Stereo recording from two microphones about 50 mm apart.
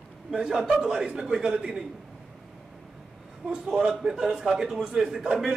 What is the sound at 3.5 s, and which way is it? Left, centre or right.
A man's voice, centre.